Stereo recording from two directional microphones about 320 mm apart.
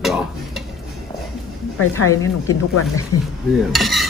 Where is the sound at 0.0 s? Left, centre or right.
Centre.